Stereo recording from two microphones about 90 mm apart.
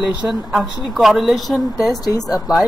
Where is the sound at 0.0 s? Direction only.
5° right (ahead or behind).